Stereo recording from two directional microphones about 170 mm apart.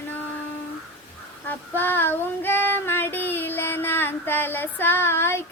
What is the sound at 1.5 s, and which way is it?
Child singing, 10° left (ahead or behind).